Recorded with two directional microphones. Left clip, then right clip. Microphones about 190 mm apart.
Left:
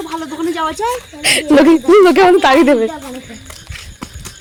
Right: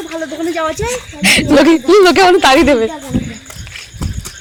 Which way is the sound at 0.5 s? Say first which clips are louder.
Even; 10° left (ahead or behind).